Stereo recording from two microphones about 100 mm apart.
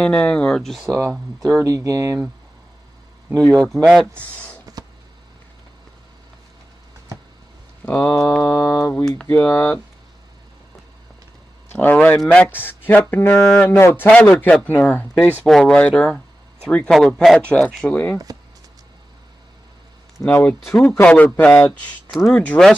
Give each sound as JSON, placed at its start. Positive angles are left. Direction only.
{"t": 0.0, "sound": "a man's voice", "side_deg": 10}
{"t": 0.8, "sound": "speech", "side_deg": -35}
{"t": 3.6, "sound": "speech", "side_deg": 0}
{"t": 4.8, "sound": "a sound", "side_deg": -40}
{"t": 7.8, "sound": "speech", "side_deg": 15}
{"t": 8.2, "sound": "mantra", "side_deg": 10}
{"t": 9.2, "sound": "speech", "side_deg": 20}
{"t": 11.7, "sound": "a man's voice", "side_deg": 15}
{"t": 15.4, "sound": "a man's voice", "side_deg": 5}
{"t": 16.9, "sound": "speech", "side_deg": 0}
{"t": 17.8, "sound": "speech", "side_deg": 20}
{"t": 20.2, "sound": "a man's voice", "side_deg": 15}
{"t": 22.1, "sound": "speech", "side_deg": 0}